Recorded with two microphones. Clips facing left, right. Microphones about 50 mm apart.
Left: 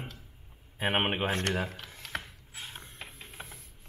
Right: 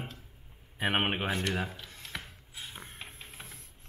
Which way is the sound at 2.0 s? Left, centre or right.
Left.